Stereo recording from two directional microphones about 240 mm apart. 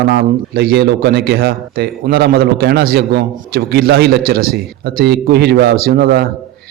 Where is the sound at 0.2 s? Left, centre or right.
Right.